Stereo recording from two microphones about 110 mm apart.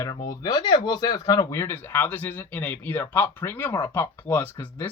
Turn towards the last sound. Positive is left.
turn(degrees=15)  # may be behind; listen again after turning